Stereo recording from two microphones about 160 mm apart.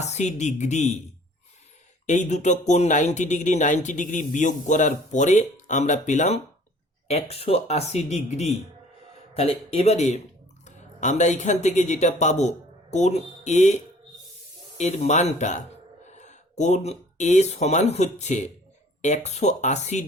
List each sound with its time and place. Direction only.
0.0 s speech: 45° left (ahead or behind)
2.0 s a man's voice: 50° left (ahead or behind)
14.8 s speech: 45° left (ahead or behind)